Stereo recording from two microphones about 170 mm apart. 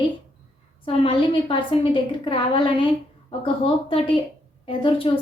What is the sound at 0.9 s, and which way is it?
A woman's voice, 35° left (ahead or behind).